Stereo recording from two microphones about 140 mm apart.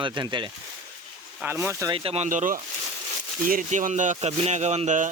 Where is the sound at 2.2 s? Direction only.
70° right (ahead or behind).